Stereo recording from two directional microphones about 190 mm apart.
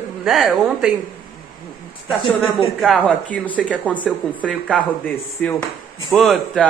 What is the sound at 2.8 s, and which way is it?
A man's voice, 5° left (ahead or behind).